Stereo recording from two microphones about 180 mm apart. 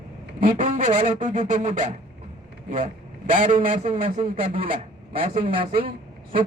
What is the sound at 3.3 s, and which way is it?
Speech, 50° right (ahead or behind).